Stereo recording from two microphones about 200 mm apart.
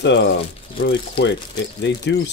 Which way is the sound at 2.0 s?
60° left (ahead or behind).